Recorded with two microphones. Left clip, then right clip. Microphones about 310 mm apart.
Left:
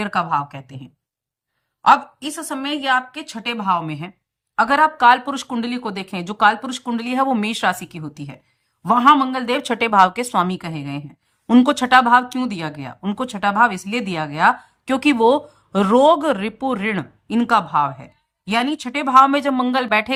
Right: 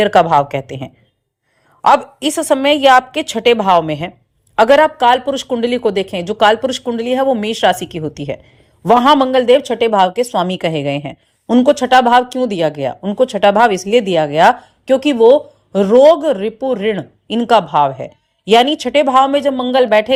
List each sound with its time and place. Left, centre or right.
0.1 s speech: right
2.3 s speech: right
2.6 s a woman's voice: centre
7.8 s speech: right
9.2 s speech: centre
11.4 s speech: centre